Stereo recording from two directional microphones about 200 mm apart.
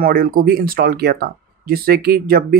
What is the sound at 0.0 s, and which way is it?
Speech, 45° right (ahead or behind).